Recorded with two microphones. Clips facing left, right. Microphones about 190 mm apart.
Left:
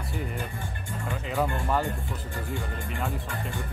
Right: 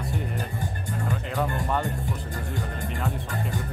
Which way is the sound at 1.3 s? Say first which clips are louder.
Left 1 dB; 5° left (ahead or behind).